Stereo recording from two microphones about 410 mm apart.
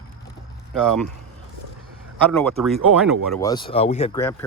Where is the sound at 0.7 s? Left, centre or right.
Centre.